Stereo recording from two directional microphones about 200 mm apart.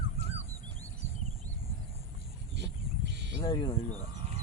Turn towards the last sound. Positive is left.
turn(degrees=25)  # may be behind; listen again after turning